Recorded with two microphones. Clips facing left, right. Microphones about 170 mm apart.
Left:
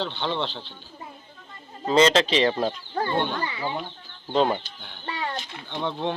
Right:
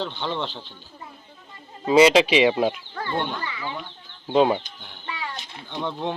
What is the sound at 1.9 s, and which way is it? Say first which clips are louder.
Speech: right 4 dB; 10° right (ahead or behind).